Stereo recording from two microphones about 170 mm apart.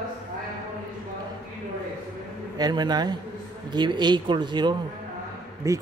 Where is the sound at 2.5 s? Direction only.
25° right (ahead or behind).